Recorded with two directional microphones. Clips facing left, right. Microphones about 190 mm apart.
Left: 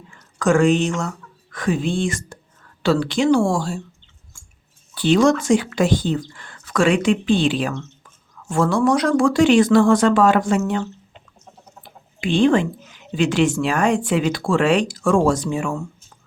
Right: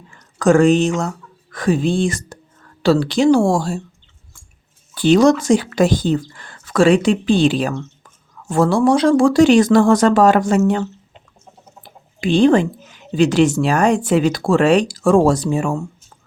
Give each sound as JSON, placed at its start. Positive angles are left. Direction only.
{"t": 0.3, "sound": "speech", "side_deg": -35}
{"t": 4.9, "sound": "speech", "side_deg": -40}
{"t": 12.2, "sound": "speech", "side_deg": -40}